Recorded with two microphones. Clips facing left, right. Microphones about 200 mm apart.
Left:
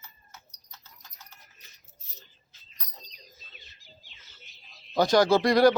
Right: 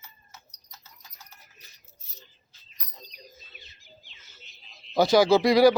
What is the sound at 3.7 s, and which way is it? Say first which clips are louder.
Bird: right 2 dB; 50° right (ahead or behind).